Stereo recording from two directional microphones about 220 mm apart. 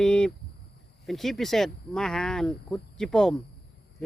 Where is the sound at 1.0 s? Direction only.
Centre (ahead or behind).